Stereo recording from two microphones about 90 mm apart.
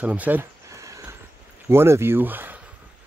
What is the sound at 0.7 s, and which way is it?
Horse, 35° right (ahead or behind).